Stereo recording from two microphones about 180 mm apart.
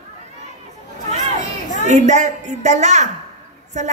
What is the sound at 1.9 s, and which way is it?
A woman's voice, 40° right (ahead or behind).